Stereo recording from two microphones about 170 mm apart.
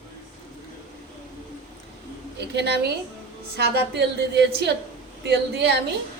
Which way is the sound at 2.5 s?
80° right.